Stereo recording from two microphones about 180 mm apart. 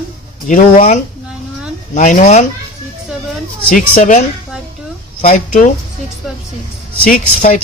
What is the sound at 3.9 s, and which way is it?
Speech, 45° left (ahead or behind).